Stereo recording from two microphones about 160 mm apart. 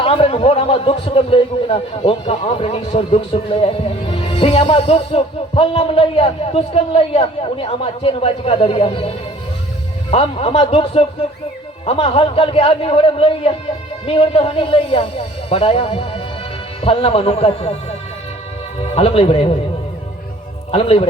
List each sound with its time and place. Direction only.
0.0 s a man's voice: 35° left (ahead or behind)
18.9 s a man's voice: 40° left (ahead or behind)
20.7 s a man's voice: 35° left (ahead or behind)